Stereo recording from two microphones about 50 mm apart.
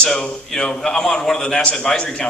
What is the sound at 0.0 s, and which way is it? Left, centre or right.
A man's voice, centre.